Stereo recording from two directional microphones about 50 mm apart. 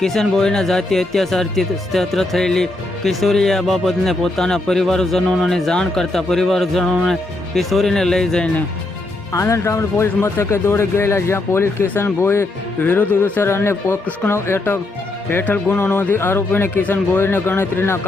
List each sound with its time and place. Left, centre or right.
0.0 s speech: centre
5.2 s speech: centre
9.3 s speech: left
12.8 s speech: left
13.4 s speech: left
15.4 s speech: left
15.8 s speech: left